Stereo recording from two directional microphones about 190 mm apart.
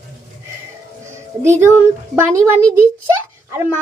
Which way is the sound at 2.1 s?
10° right (ahead or behind).